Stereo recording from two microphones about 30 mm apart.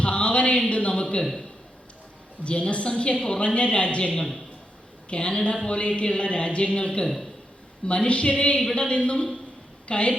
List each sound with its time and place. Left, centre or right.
0.0 s a sound: left
1.2 s a man's voice: centre
2.4 s a woman's voice: left
9.1 s a man's voice: left
9.9 s a woman's voice: left